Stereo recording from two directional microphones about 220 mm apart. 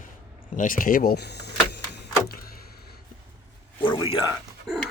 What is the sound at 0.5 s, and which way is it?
Speech, 35° left (ahead or behind).